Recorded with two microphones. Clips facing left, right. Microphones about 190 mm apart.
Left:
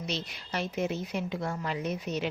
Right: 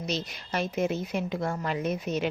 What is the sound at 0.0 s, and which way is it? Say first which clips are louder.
A woman's voice: right 3 dB; 45° right (ahead or behind).